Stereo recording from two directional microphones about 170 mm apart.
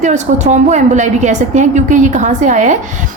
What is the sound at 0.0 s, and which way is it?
A woman's voice, 45° right (ahead or behind).